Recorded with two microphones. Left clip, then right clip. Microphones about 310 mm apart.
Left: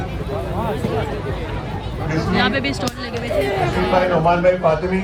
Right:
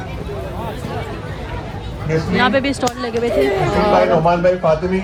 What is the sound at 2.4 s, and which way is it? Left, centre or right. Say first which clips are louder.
Speech: right 5 dB; centre.